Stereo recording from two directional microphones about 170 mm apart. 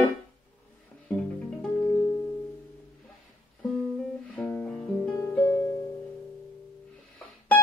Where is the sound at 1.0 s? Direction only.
5° left (ahead or behind).